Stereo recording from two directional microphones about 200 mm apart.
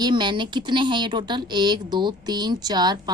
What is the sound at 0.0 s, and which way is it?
Speech, 20° right (ahead or behind).